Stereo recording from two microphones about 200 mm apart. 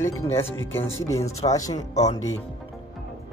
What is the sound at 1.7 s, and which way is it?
Speech, 35° left (ahead or behind).